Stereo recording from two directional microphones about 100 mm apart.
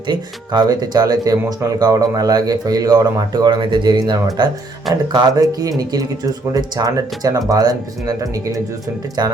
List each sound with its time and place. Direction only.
0.1 s speech: 45° right (ahead or behind)